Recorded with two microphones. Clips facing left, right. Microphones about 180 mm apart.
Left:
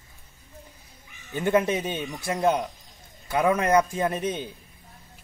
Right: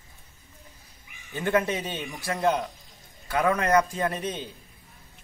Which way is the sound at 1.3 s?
15° left (ahead or behind).